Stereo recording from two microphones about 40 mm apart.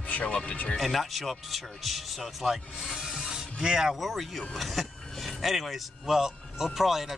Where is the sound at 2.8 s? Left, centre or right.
Centre.